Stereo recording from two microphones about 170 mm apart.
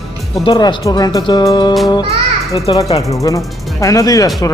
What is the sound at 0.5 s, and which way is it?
Speech, 20° left (ahead or behind).